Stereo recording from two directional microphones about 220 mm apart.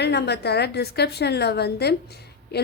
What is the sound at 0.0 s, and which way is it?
A woman's voice, 50° left (ahead or behind).